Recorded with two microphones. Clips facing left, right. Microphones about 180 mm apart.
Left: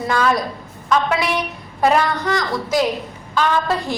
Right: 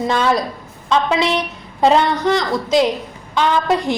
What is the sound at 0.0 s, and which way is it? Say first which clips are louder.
A woman's voice: right 2 dB; 25° right (ahead or behind).